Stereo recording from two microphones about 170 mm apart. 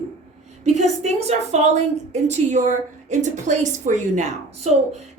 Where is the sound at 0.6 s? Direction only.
40° right (ahead or behind).